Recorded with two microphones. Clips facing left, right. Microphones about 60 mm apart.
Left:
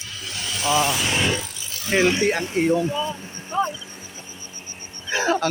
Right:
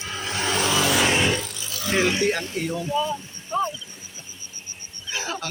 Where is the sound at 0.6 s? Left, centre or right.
Right.